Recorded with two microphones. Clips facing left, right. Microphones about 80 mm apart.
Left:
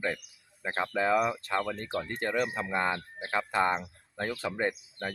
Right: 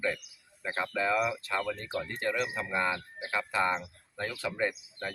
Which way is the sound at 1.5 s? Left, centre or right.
Left.